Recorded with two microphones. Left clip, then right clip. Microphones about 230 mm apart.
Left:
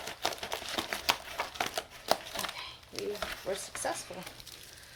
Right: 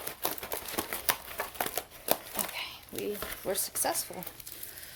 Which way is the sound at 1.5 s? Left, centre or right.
Centre.